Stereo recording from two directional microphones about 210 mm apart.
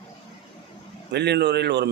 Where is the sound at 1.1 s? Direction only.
55° right (ahead or behind).